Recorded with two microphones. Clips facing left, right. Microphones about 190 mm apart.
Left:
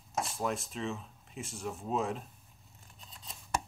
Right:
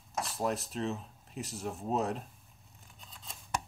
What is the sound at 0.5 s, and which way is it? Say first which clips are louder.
Speech: right 2 dB; centre (ahead or behind).